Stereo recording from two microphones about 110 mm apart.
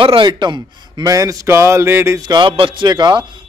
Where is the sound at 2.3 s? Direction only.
45° right (ahead or behind).